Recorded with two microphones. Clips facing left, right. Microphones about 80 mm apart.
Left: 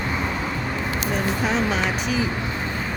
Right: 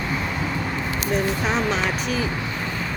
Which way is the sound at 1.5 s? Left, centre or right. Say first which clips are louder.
Even; centre.